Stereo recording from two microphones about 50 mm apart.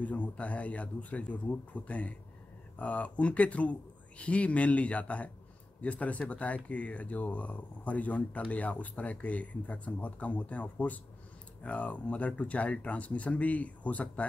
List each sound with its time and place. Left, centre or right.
0.0 s speech: left